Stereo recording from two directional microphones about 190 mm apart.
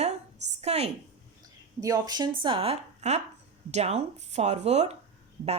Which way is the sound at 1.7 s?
20° right (ahead or behind).